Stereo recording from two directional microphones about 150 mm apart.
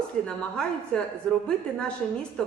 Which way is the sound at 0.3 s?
5° left (ahead or behind).